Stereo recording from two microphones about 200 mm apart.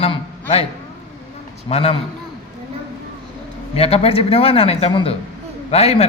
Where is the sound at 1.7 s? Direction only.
30° left (ahead or behind).